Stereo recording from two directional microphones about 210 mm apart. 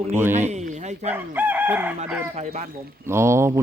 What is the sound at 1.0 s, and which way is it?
Speech, 10° right (ahead or behind).